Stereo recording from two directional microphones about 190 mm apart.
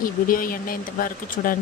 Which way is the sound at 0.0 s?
50° left (ahead or behind).